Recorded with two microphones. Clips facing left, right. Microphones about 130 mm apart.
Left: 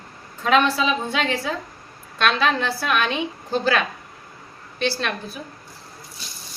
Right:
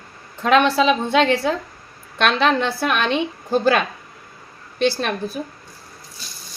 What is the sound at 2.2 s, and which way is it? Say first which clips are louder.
Speech: right 3 dB; 50° right (ahead or behind).